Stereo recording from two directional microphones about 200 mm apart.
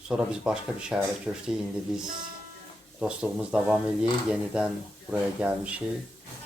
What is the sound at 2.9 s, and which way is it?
Speech, 5° right (ahead or behind).